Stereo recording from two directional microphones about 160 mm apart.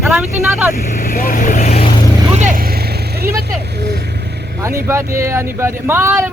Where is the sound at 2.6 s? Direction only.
75° right (ahead or behind); by 4.4 s 90° right.